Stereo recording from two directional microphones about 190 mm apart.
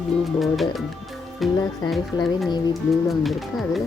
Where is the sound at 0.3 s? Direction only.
Centre (ahead or behind).